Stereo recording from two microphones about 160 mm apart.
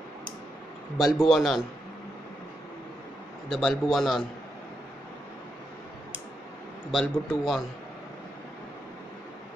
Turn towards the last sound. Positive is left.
turn(degrees=0)  # may be behind; listen again after turning